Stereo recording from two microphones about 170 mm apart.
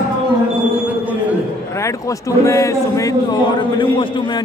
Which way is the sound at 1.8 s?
15° left (ahead or behind).